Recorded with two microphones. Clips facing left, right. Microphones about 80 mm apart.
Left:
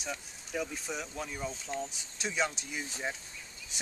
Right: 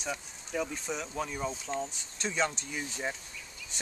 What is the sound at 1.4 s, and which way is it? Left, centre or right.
Speech, centre.